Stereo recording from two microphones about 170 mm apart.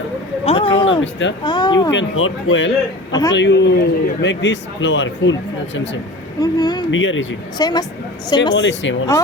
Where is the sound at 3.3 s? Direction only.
90° left.